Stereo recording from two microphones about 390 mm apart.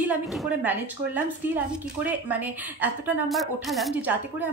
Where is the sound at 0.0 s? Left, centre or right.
Centre.